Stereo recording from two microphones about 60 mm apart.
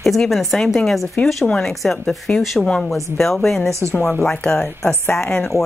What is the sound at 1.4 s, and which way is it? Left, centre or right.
Speech, centre.